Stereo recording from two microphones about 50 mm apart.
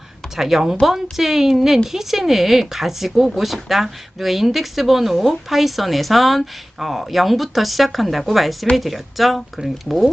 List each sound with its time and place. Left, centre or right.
0.3 s speech: centre